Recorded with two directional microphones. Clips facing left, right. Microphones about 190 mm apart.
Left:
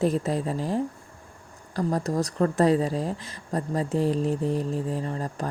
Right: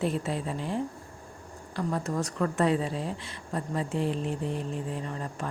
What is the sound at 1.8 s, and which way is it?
A woman's voice, 40° left (ahead or behind).